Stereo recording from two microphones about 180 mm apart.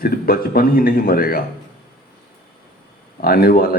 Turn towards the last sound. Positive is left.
turn(degrees=55)  # may be behind; listen again after turning